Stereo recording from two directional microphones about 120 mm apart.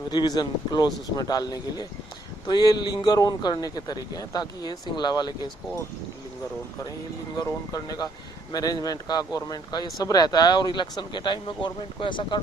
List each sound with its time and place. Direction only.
0.1 s speech: 35° left (ahead or behind)
7.4 s speech: 30° left (ahead or behind)